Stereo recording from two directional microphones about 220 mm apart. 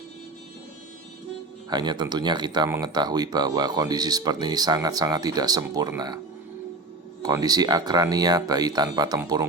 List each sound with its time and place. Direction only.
1.7 s speech: 20° right (ahead or behind)
7.2 s speech: 15° right (ahead or behind)